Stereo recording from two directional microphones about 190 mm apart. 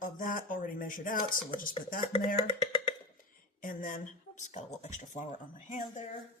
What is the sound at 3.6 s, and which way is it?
Speech, 45° left (ahead or behind).